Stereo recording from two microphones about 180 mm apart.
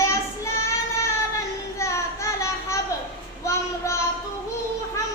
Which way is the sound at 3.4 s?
15° left (ahead or behind).